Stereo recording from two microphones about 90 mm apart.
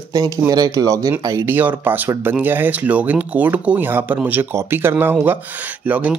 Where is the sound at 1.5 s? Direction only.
20° right (ahead or behind).